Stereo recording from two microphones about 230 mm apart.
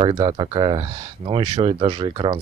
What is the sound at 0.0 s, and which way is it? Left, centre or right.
Speech, right.